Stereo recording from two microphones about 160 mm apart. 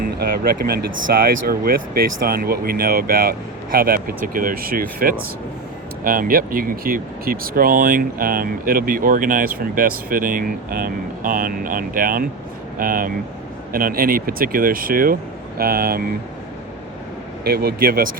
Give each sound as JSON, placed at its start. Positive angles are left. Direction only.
{"t": 0.0, "sound": "speech", "side_deg": -70}
{"t": 17.4, "sound": "speech", "side_deg": -75}